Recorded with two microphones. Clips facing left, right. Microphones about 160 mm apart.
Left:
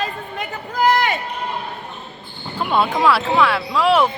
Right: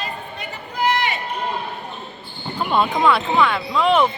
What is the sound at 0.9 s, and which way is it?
Run, 45° left (ahead or behind).